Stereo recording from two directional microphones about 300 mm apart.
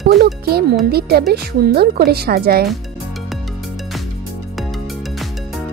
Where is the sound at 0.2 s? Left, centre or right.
Right.